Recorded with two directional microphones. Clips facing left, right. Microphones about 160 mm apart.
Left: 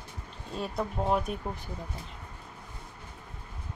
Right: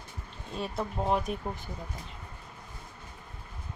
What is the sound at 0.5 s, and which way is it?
Speech, centre (ahead or behind).